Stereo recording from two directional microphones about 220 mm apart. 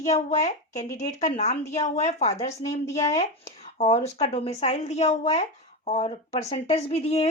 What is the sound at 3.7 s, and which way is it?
Speech, 30° left (ahead or behind).